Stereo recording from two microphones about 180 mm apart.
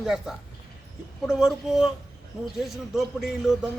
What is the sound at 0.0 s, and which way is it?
Speech, centre (ahead or behind).